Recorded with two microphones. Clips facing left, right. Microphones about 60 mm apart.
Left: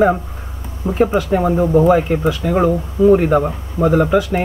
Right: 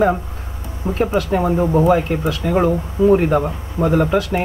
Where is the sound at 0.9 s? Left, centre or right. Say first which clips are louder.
Left 3 dB; left.